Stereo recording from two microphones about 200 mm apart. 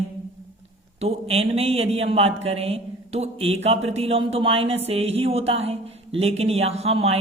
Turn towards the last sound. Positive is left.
turn(degrees=-30)  # may be behind; listen again after turning